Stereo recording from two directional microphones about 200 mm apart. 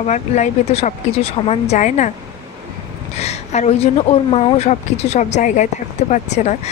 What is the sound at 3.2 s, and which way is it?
A woman's voice, 35° left (ahead or behind).